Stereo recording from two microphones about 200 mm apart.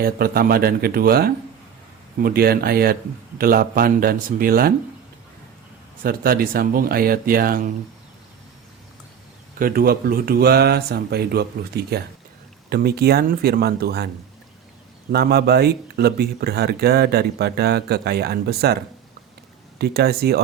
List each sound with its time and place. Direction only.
0.0 s speech: 50° right (ahead or behind)
6.0 s speech: 45° right (ahead or behind)
9.6 s speech: 45° right (ahead or behind)
15.1 s speech: 50° right (ahead or behind)
19.8 s speech: 55° right (ahead or behind)